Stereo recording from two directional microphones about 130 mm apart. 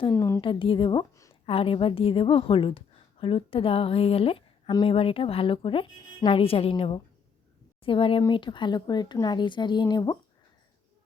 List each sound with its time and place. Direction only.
0.1 s a woman's voice: 25° left (ahead or behind)
0.4 s a woman's voice: 40° left (ahead or behind)